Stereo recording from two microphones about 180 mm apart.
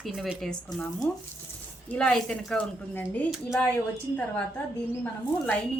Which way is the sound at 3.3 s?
5° right (ahead or behind).